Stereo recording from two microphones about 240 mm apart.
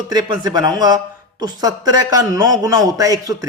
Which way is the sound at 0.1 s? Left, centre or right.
Centre.